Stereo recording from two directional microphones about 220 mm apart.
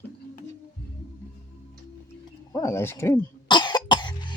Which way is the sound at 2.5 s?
15° left (ahead or behind).